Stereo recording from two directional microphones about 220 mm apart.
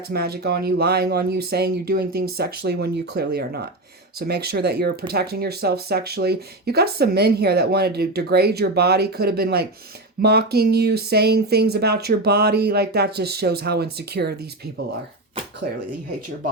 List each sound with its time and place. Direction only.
0.1 s speech: 45° right (ahead or behind)
15.6 s speech: 40° right (ahead or behind)